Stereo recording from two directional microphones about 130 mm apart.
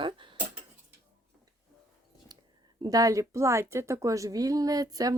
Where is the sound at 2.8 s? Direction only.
30° right (ahead or behind).